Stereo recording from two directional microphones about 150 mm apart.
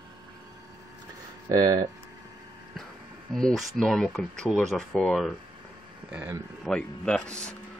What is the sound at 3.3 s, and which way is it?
Speech, 5° left (ahead or behind).